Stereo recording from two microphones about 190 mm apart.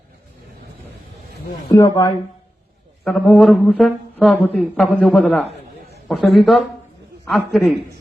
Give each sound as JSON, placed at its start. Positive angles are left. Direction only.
{"t": 1.7, "sound": "speech", "side_deg": 15}
{"t": 3.0, "sound": "speech", "side_deg": 0}